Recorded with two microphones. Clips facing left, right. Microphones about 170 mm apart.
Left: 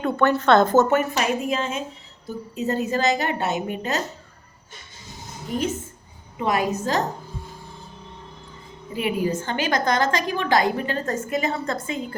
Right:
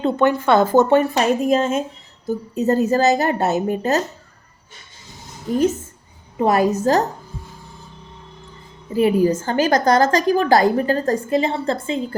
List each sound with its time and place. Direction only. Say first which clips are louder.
0.0 s speech: right 3 dB; 15° right (ahead or behind)
0.9 s a woman's voice: right 5 dB; 30° right (ahead or behind)
6.4 s a woman's voice: right 6 dB; 40° right (ahead or behind)
9.0 s a woman's voice: right 8 dB; 40° right (ahead or behind)